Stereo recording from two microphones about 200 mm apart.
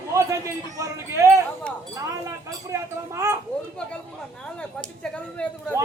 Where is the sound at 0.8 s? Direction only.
15° right (ahead or behind).